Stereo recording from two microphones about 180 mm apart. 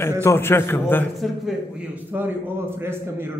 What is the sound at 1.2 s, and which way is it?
A man's voice, 5° right (ahead or behind).